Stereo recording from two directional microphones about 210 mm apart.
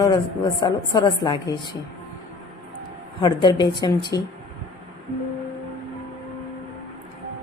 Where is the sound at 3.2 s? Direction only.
20° left (ahead or behind).